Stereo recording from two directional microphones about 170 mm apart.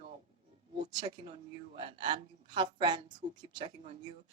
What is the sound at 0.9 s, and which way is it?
Speech, 25° right (ahead or behind).